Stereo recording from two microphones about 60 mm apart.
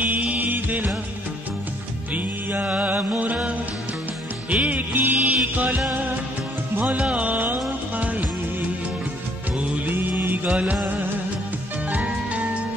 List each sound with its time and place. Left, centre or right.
0.0 s music: right
2.1 s music: right
9.8 s mantra: right
10.5 s music of bollywood: right